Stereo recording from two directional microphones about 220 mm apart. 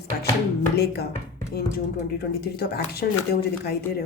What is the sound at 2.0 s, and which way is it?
Speech, 45° left (ahead or behind).